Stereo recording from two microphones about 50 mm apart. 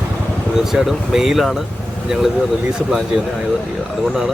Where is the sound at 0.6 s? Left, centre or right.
Centre.